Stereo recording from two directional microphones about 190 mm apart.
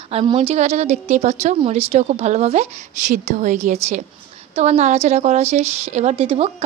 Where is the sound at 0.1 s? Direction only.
30° right (ahead or behind).